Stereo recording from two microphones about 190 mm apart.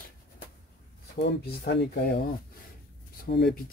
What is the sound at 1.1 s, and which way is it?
Speech, 60° left (ahead or behind).